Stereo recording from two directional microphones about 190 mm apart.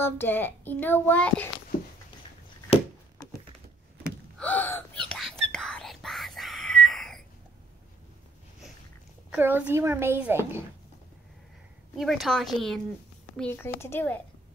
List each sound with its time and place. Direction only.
0.0 s a child's voice: 10° left (ahead or behind)
2.7 s a sound: 30° left (ahead or behind)
4.4 s gasp: 10° left (ahead or behind)
5.0 s whispering: 5° left (ahead or behind)
9.3 s a child's voice: 10° right (ahead or behind)
12.0 s a child's voice: centre (ahead or behind)